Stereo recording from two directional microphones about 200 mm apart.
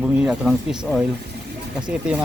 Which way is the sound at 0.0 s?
5° right (ahead or behind).